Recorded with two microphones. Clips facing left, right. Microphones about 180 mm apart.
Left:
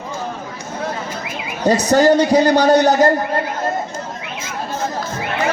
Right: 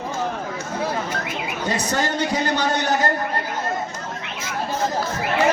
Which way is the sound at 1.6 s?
40° left (ahead or behind).